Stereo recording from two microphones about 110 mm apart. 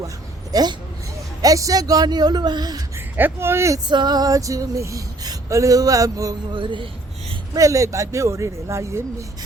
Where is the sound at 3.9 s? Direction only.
40° right (ahead or behind).